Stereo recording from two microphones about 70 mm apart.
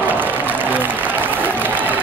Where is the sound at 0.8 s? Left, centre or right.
Right.